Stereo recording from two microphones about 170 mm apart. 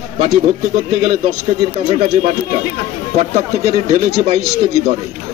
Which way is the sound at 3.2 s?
40° right (ahead or behind).